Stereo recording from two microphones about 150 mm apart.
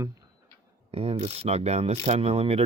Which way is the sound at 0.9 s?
40° right (ahead or behind).